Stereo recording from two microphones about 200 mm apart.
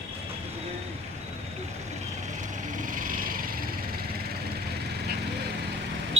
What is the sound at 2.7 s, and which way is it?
Lawn mower, 40° right (ahead or behind).